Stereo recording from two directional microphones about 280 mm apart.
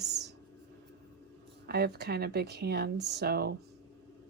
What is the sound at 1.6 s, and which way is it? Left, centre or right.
Speech, right.